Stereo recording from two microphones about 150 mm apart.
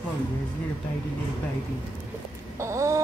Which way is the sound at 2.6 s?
20° right (ahead or behind).